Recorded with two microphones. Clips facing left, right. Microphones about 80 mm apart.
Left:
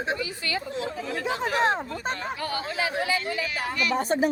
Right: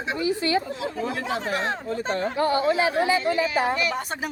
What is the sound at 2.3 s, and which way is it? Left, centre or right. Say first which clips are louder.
Speech: right 9 dB; right.